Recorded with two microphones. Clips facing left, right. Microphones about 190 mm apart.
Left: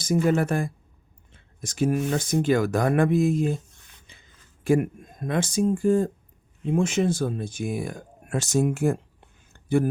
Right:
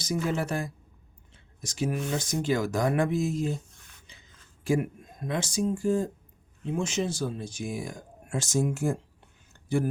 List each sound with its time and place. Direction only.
0.0 s speech: 50° left (ahead or behind)
4.6 s speech: 55° left (ahead or behind)
9.5 s a sound: 55° left (ahead or behind)